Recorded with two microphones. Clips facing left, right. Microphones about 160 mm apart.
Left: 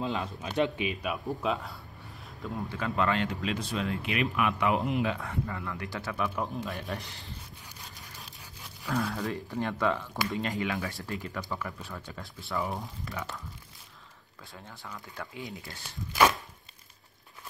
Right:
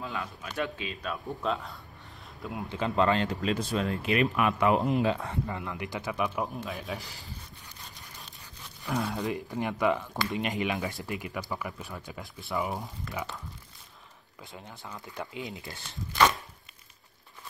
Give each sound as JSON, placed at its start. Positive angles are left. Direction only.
{"t": 0.0, "sound": "speech", "side_deg": 25}
{"t": 2.2, "sound": "a sound", "side_deg": -5}
{"t": 2.7, "sound": "speech", "side_deg": -25}
{"t": 3.5, "sound": "speech", "side_deg": -45}
{"t": 9.1, "sound": "speech", "side_deg": -20}
{"t": 12.7, "sound": "speech", "side_deg": 0}
{"t": 13.1, "sound": "speech", "side_deg": -15}
{"t": 14.4, "sound": "speech", "side_deg": -20}
{"t": 16.1, "sound": "chopping", "side_deg": 0}